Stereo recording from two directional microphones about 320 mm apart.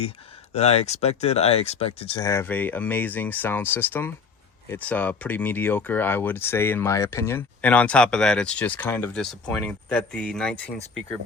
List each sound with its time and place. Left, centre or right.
0.5 s speech: centre